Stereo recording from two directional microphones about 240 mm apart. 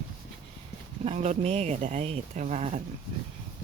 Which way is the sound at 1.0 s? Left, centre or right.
Right.